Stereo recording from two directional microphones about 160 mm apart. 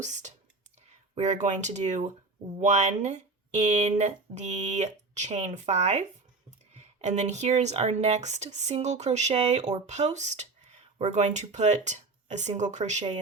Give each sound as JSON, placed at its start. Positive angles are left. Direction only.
{"t": 0.0, "sound": "speech", "side_deg": -50}